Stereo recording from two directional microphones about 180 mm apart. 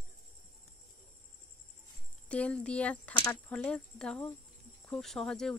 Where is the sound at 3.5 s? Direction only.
5° left (ahead or behind).